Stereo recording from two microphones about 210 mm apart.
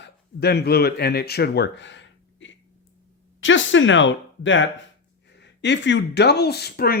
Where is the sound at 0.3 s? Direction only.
50° left (ahead or behind).